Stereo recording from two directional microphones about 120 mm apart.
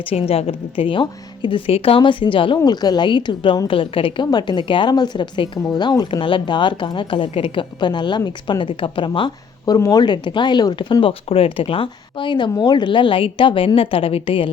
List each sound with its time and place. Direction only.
0.1 s a woman's voice: 55° left (ahead or behind)
11.0 s speech: 50° left (ahead or behind)